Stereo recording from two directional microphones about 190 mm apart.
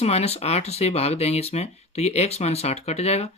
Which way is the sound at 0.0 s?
35° left (ahead or behind).